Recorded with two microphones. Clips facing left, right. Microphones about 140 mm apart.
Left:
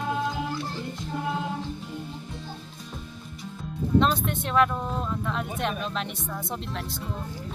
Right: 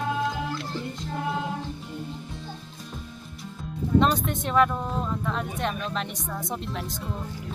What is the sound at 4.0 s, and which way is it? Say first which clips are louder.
Speech: right 1 dB; centre (ahead or behind).